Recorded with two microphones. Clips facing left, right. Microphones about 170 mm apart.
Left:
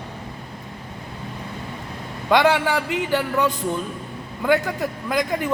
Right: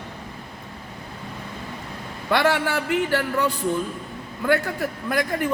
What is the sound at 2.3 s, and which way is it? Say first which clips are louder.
Speech: left 3 dB; 15° left (ahead or behind).